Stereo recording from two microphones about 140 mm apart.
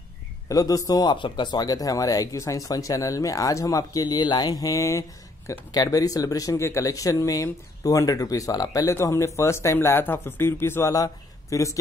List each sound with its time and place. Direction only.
0.5 s speech: 25° left (ahead or behind)